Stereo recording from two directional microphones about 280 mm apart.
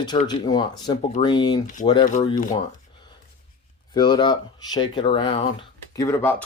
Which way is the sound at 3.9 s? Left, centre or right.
Centre.